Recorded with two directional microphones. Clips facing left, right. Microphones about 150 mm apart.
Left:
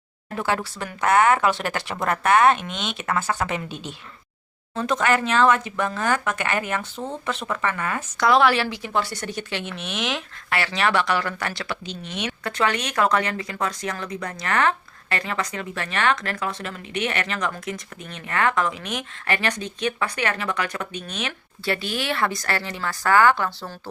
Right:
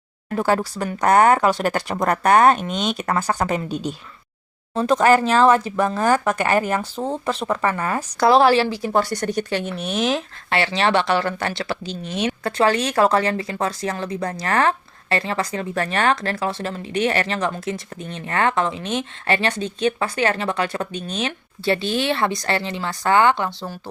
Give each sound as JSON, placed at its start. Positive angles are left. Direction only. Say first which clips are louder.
{"t": 0.3, "sound": "speech", "louder": "right 5 dB", "side_deg": -40}